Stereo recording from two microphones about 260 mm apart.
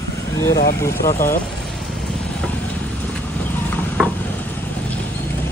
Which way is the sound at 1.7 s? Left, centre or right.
Centre.